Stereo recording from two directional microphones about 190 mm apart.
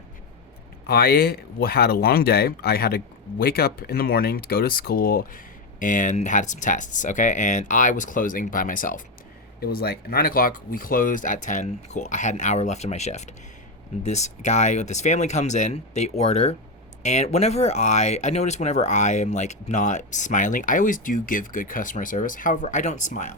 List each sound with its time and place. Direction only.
0.9 s speech: 55° left (ahead or behind)